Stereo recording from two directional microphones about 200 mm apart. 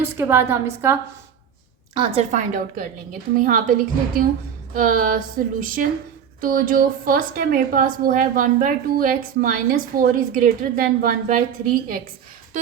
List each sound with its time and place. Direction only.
0.0 s a woman's voice: 10° right (ahead or behind)
1.9 s a woman's voice: 25° right (ahead or behind)
2.3 s a woman's voice: 40° right (ahead or behind)